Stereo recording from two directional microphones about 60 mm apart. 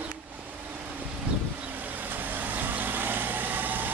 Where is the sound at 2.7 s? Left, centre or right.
Right.